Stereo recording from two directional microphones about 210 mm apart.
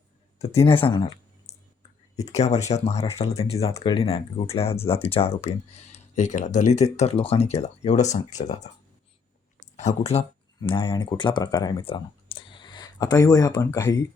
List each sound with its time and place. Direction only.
0.3 s speech: 30° left (ahead or behind)
2.1 s speech: 30° left (ahead or behind)